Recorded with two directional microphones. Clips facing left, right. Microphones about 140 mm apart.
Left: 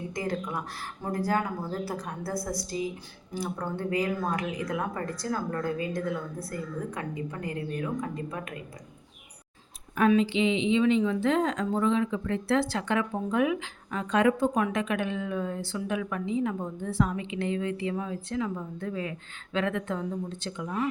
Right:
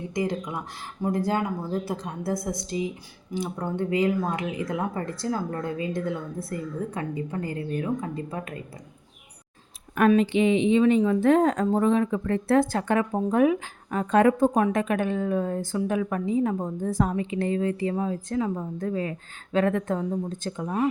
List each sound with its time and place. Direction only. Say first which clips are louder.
0.1 s speech: right 5 dB; 20° right (ahead or behind)
10.1 s speech: right 4 dB; 55° right (ahead or behind)